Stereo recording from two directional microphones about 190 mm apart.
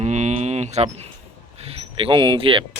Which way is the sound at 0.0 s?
40° right (ahead or behind).